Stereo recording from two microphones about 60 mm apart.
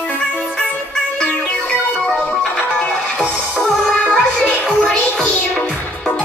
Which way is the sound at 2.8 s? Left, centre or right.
Centre.